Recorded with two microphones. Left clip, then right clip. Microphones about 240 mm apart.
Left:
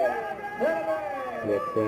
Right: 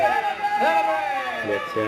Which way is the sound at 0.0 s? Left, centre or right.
Centre.